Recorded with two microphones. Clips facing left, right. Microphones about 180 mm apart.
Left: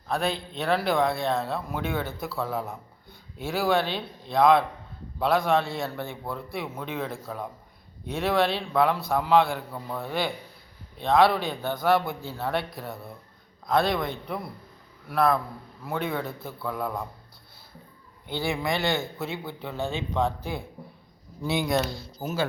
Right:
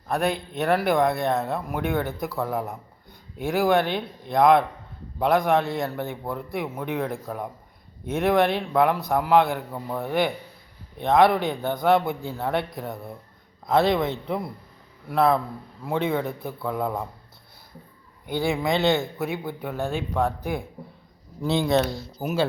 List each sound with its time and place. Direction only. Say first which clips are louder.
0.1 s a man's voice: right 3 dB; 15° right (ahead or behind)
18.3 s a man's voice: right 4 dB; 20° right (ahead or behind)
22.2 s a man's voice: right 4 dB; 20° right (ahead or behind)